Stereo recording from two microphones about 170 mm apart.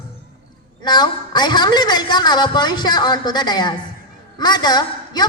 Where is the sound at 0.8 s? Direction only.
25° left (ahead or behind).